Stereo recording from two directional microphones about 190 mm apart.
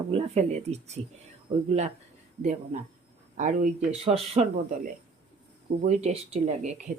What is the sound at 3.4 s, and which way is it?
Speech, 40° right (ahead or behind).